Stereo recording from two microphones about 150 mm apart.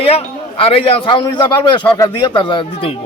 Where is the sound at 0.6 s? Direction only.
35° left (ahead or behind).